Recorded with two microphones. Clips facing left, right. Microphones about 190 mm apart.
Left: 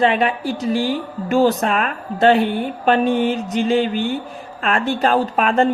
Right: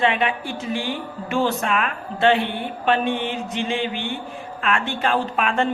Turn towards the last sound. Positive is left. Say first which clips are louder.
# left 5 dB
turn(degrees=40)  # may be behind; listen again after turning